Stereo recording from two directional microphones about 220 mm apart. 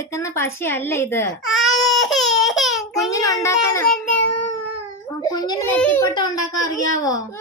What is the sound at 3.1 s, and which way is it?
Speech, 15° left (ahead or behind).